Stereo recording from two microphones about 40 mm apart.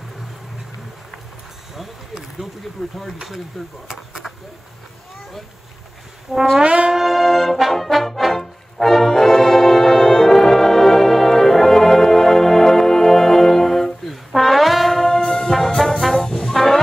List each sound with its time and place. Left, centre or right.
2.8 s mechanisms: centre
3.8 s speech: centre
6.3 s speech: centre
6.6 s brass instrument: right
6.9 s brass instrument: centre
16.0 s brass instrument: centre
16.3 s music: centre